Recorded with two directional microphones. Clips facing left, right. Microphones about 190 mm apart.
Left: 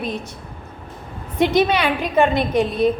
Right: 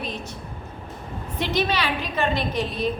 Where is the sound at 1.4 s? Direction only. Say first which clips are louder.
Left 8 dB; 55° left (ahead or behind).